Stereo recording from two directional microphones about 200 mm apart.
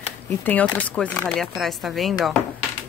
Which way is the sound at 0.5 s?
5° left (ahead or behind).